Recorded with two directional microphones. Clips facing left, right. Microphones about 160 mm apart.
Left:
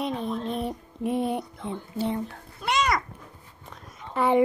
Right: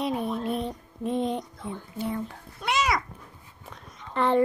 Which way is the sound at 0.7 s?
10° left (ahead or behind).